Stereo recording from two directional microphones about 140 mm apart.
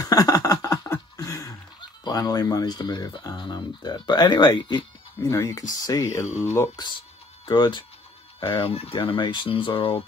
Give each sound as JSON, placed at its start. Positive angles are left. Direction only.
{"t": 0.0, "sound": "a sound", "side_deg": 25}
{"t": 2.0, "sound": "speech", "side_deg": 30}
{"t": 5.2, "sound": "speech", "side_deg": 20}
{"t": 7.4, "sound": "speech", "side_deg": 35}